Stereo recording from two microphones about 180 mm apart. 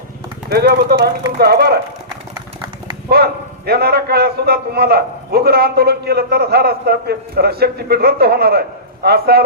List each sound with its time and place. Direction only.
0.5 s a man's voice: 60° right (ahead or behind)
3.1 s a man's voice: 60° right (ahead or behind)